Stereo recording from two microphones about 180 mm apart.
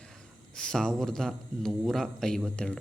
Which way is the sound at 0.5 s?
5° left (ahead or behind).